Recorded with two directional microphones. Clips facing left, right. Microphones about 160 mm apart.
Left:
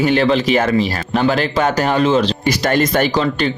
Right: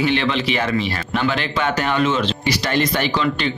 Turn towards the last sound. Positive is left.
turn(degrees=40)  # may be behind; listen again after turning